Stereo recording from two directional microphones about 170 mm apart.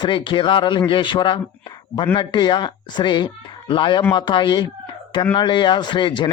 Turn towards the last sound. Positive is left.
turn(degrees=25)  # may be behind; listen again after turning